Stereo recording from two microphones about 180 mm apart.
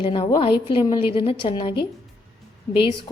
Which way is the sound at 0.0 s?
30° left (ahead or behind).